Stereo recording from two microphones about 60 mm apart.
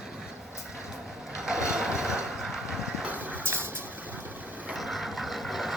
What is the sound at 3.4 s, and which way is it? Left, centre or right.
Vehicle, right.